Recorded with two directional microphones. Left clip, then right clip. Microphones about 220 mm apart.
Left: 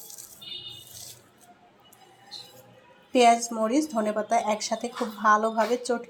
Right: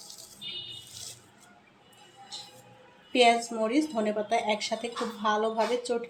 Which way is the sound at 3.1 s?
15° left (ahead or behind).